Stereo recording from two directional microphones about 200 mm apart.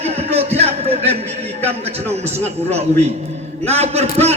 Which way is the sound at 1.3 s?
30° right (ahead or behind).